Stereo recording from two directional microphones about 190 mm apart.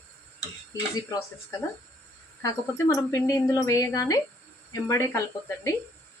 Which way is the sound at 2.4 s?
15° left (ahead or behind).